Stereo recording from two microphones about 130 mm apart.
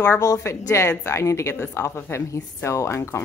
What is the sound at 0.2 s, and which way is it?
A woman's voice, 25° left (ahead or behind).